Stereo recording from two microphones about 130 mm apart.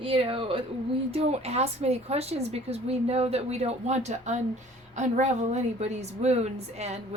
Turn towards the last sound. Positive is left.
turn(degrees=-55)  # may be behind; listen again after turning